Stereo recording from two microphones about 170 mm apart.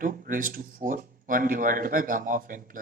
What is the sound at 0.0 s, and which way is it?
Speech, 55° right (ahead or behind).